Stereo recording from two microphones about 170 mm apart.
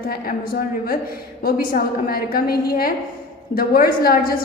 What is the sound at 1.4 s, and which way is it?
A woman's voice, 60° left (ahead or behind).